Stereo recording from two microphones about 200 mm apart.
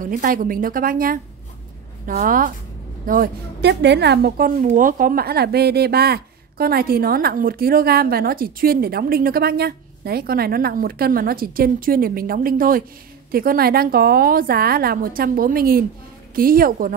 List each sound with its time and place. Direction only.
0.0 s a woman's voice: 45° right (ahead or behind)
3.6 s a woman's voice: 60° right (ahead or behind)